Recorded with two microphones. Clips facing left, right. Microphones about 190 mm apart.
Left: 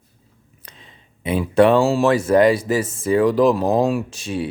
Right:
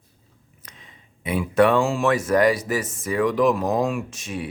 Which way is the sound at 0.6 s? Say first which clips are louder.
Left 2 dB; 30° left (ahead or behind).